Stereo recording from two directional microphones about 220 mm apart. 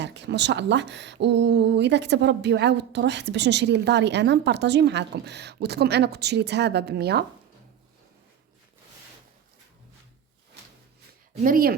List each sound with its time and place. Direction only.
0.0 s speech: 50° right (ahead or behind)
11.4 s speech: 40° right (ahead or behind)